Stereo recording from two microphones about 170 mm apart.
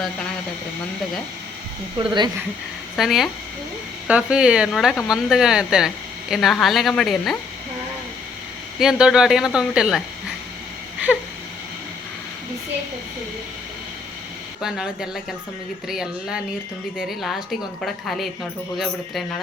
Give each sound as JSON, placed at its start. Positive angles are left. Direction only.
{"t": 2.0, "sound": "speech", "side_deg": -25}
{"t": 2.9, "sound": "speech", "side_deg": 0}
{"t": 8.8, "sound": "speech", "side_deg": -5}
{"t": 14.6, "sound": "speech", "side_deg": -5}